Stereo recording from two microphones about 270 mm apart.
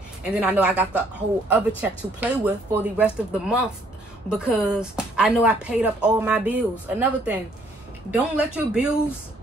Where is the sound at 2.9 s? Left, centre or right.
Centre.